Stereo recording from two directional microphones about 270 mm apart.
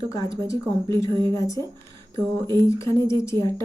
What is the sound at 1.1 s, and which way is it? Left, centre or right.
Speech, centre.